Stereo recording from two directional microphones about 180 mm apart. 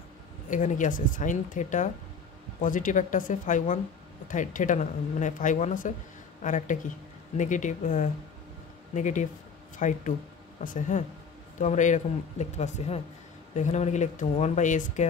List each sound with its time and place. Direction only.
0.5 s a woman's voice: 45° left (ahead or behind)